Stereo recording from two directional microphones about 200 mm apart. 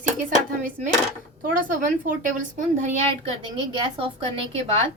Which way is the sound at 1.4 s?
45° right (ahead or behind).